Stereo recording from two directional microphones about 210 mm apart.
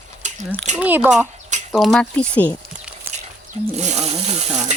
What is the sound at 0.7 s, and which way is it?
Speech, 5° right (ahead or behind).